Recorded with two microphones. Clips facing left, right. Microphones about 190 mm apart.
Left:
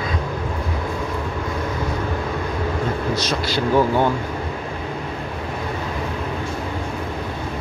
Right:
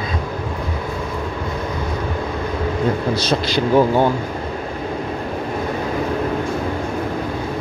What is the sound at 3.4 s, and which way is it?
Speech, 15° right (ahead or behind).